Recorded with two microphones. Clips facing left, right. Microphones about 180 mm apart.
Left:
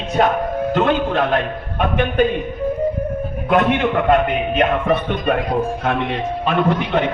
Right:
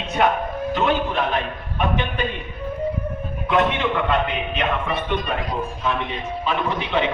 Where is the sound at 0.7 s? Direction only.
50° left (ahead or behind).